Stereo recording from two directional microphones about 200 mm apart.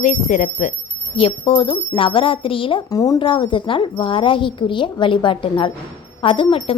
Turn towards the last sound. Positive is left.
turn(degrees=25)  # may be behind; listen again after turning